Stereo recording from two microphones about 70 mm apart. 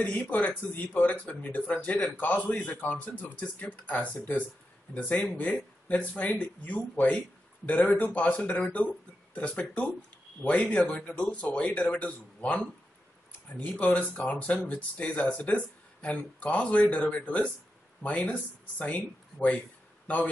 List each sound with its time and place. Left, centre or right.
0.2 s speech: left